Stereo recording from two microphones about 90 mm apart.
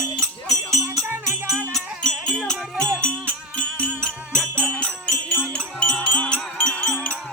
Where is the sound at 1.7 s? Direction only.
5° left (ahead or behind).